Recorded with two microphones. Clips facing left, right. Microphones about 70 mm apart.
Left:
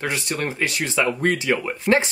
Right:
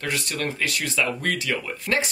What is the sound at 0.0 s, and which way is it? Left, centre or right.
Speech, left.